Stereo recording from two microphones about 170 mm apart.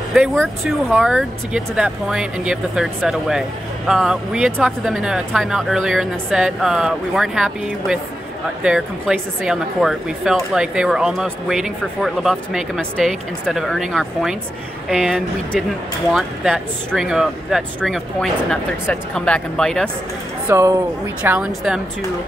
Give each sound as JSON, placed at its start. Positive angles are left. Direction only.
{"t": 0.1, "sound": "speech", "side_deg": 0}
{"t": 20.4, "sound": "a woman's voice", "side_deg": -15}